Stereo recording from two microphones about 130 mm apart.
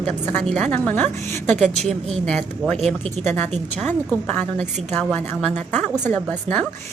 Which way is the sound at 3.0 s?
60° right (ahead or behind).